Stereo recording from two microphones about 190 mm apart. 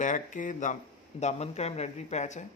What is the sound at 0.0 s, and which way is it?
Speech, 40° left (ahead or behind).